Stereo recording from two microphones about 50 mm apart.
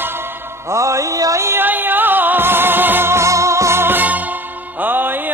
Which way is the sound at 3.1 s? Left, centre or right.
Right.